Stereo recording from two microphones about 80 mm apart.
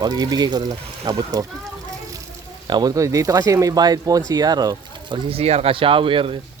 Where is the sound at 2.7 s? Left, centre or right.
Right.